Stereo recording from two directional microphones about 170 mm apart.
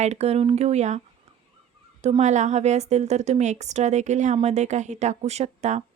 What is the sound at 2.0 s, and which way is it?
A woman's voice, 40° right (ahead or behind).